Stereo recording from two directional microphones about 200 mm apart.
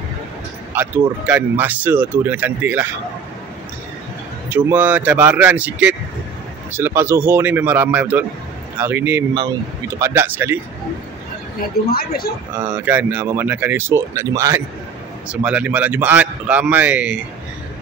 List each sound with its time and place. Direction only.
0.7 s speech: 10° right (ahead or behind)
4.5 s speech: 10° right (ahead or behind)
11.9 s speech: 50° left (ahead or behind)
12.5 s speech: 10° right (ahead or behind)